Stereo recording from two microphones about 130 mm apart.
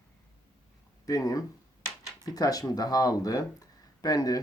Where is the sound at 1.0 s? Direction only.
30° left (ahead or behind).